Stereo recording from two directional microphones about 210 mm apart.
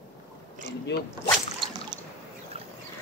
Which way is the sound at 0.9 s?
55° left (ahead or behind).